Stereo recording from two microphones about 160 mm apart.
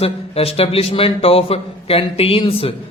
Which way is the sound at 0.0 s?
40° left (ahead or behind).